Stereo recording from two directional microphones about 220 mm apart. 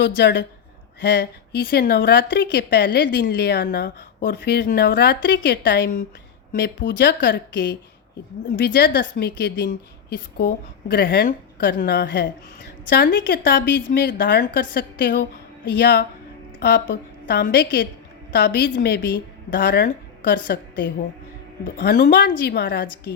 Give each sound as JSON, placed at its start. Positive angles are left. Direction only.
{"t": 0.0, "sound": "a woman's voice", "side_deg": 50}